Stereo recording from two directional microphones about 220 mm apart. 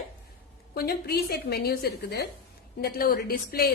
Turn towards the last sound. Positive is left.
turn(degrees=45)  # may be behind; listen again after turning